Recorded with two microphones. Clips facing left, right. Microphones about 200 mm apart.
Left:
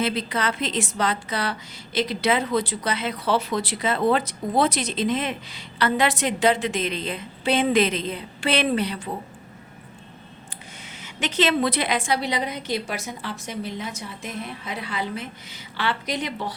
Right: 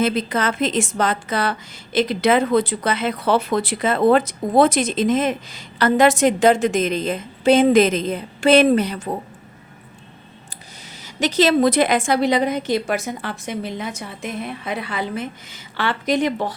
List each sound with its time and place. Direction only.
0.0 s a woman's voice: 45° right (ahead or behind)
11.0 s a woman's voice: 40° right (ahead or behind)